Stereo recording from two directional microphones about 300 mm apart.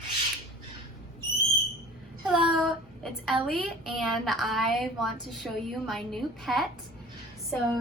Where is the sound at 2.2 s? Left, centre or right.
Centre.